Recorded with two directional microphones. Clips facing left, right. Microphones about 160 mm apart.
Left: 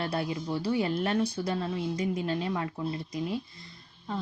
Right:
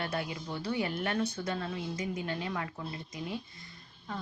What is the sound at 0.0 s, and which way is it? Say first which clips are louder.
Speech: left 4 dB; 30° left (ahead or behind).